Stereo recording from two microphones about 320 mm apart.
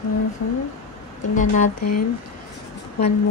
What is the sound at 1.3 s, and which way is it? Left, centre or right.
Speech, left.